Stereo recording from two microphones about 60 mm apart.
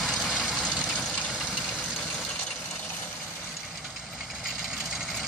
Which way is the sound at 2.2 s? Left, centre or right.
Centre.